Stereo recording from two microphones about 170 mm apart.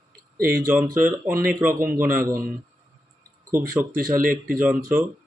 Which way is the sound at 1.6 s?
10° right (ahead or behind).